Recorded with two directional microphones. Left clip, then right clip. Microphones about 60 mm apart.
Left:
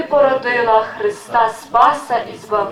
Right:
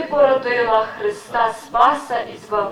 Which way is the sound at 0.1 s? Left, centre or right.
Left.